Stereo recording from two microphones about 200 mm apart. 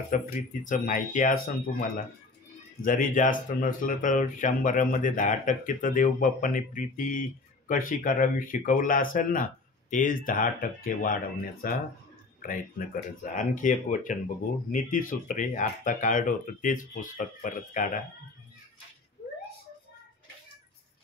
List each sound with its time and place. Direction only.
0.1 s speech: 40° left (ahead or behind)